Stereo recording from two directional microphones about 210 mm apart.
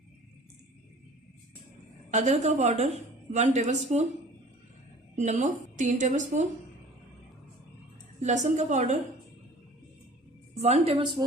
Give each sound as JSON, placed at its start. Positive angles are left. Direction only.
{"t": 2.0, "sound": "a woman's voice", "side_deg": -35}
{"t": 5.1, "sound": "a woman's voice", "side_deg": -35}
{"t": 8.2, "sound": "a woman's voice", "side_deg": -35}
{"t": 10.6, "sound": "a woman's voice", "side_deg": -30}